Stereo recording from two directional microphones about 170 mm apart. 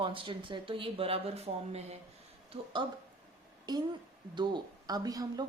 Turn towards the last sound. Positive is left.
turn(degrees=-20)  # may be behind; listen again after turning